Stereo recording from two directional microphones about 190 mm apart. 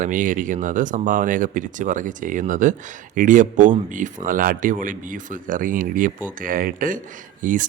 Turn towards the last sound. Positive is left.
turn(degrees=-45)  # may be behind; listen again after turning